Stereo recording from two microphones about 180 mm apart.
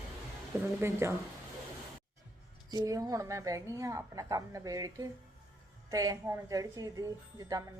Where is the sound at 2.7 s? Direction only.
20° right (ahead or behind).